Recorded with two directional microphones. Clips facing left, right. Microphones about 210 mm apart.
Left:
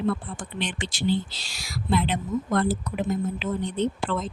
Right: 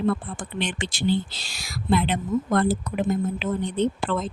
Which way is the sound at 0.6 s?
55° right (ahead or behind).